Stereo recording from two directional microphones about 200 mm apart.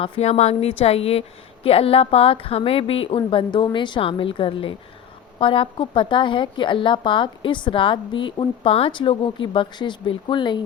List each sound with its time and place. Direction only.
0.0 s a woman's voice: 30° left (ahead or behind)